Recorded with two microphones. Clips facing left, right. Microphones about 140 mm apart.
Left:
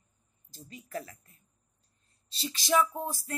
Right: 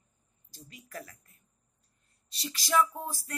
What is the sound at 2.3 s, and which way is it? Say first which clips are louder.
Speech: left 2 dB; 25° left (ahead or behind).